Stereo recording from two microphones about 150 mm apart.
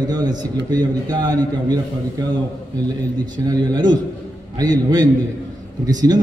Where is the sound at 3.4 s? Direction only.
25° right (ahead or behind).